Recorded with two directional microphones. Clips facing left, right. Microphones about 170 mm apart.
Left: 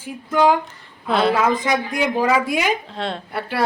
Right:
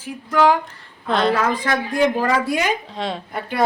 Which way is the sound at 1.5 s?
20° left (ahead or behind).